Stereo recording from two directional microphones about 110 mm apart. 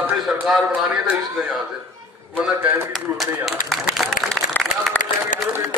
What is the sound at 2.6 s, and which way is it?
Speech, 15° right (ahead or behind).